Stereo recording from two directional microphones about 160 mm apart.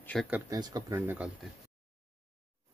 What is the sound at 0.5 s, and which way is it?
Speech, 25° right (ahead or behind).